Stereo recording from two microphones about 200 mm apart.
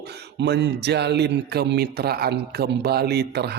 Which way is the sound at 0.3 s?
60° right (ahead or behind).